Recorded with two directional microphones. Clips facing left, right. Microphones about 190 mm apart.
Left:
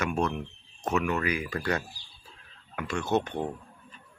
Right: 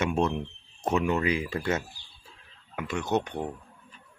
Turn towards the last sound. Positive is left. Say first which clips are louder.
# left 1 dB
turn(degrees=-15)  # may be behind; listen again after turning